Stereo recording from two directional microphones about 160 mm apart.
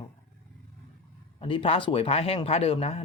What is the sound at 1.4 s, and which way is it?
Speech, 35° left (ahead or behind).